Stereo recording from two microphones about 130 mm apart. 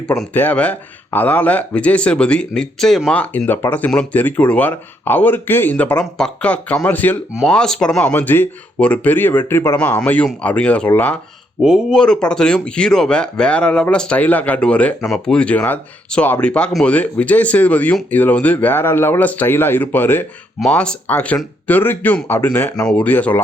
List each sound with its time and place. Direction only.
0.3 s speech: 10° left (ahead or behind)
3.2 s speech: 15° left (ahead or behind)
11.6 s speech: centre (ahead or behind)